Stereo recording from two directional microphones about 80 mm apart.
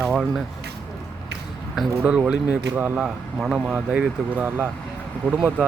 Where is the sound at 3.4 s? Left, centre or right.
Centre.